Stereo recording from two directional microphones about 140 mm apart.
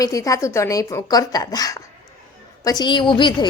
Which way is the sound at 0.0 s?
25° left (ahead or behind).